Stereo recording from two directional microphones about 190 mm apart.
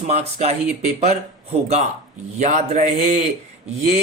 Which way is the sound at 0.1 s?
35° right (ahead or behind).